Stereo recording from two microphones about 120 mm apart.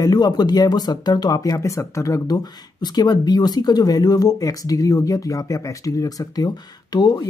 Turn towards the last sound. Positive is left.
turn(degrees=35)  # may be behind; listen again after turning